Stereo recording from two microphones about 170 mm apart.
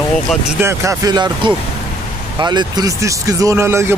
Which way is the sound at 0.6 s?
15° right (ahead or behind).